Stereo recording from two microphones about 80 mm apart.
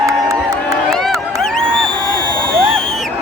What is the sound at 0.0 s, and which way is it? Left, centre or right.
Crowd, right.